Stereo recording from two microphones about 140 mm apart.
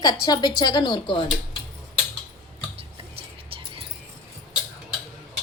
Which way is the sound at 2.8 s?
40° right (ahead or behind).